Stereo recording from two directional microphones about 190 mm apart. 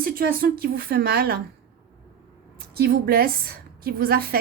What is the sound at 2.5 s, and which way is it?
A woman's voice, 55° right (ahead or behind).